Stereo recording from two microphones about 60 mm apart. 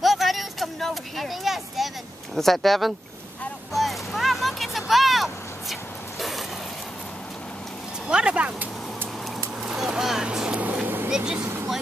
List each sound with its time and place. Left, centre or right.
0.0 s a sound: centre
2.3 s speech: centre
3.7 s vehicle: centre
8.1 s speech: centre
9.6 s vehicle: centre; by 11.0 s right
11.1 s vehicle: centre